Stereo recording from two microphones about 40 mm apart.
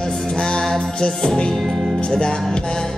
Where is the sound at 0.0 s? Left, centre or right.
Centre.